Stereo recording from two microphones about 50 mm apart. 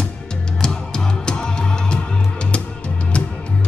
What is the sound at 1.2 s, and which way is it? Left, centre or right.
Music, centre.